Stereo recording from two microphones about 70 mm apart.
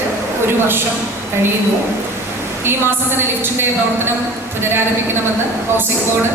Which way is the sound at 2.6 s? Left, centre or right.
Right.